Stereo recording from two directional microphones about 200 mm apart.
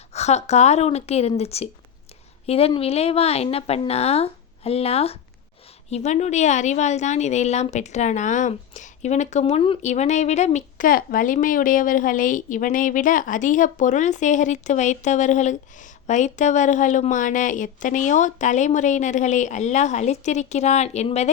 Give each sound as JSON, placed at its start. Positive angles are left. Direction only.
{"t": 0.1, "sound": "a woman's voice", "side_deg": 35}